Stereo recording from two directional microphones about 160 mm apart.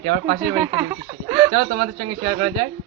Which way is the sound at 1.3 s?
20° right (ahead or behind).